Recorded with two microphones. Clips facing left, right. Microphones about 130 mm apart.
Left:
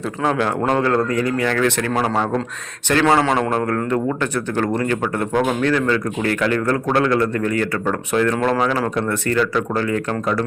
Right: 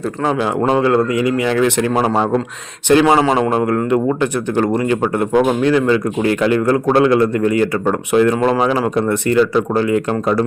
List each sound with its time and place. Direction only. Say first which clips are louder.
0.7 s speech: right 5 dB; 10° right (ahead or behind)
2.9 s speech: right 5 dB; 15° right (ahead or behind)
3.2 s a man's voice: right 4 dB; 5° right (ahead or behind)